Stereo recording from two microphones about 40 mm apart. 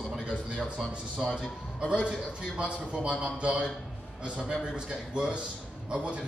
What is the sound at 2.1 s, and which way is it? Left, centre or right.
A man's voice, right.